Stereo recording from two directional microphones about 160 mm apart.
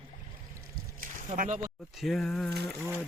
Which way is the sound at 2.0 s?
Centre (ahead or behind).